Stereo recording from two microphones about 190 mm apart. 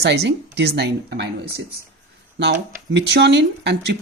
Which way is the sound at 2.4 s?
65° right (ahead or behind).